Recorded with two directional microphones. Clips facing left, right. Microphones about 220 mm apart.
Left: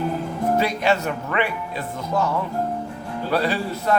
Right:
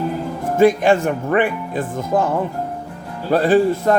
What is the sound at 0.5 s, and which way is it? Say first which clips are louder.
Speech: right 9 dB; 50° right (ahead or behind).